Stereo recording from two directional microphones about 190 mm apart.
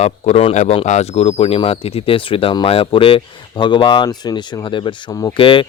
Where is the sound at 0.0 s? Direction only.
35° left (ahead or behind).